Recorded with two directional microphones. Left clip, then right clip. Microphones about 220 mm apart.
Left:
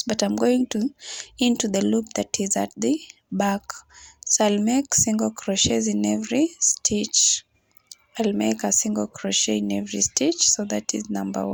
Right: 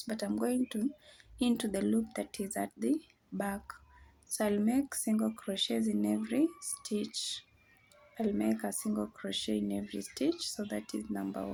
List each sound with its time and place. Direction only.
0.0 s speech: 35° left (ahead or behind)